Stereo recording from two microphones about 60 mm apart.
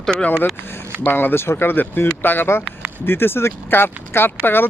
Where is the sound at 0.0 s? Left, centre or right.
Centre.